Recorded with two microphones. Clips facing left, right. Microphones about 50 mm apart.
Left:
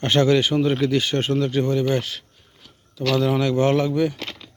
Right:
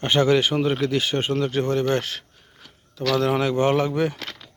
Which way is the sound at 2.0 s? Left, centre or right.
Right.